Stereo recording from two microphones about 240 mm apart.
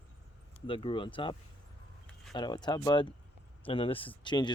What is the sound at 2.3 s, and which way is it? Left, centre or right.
Speech, centre.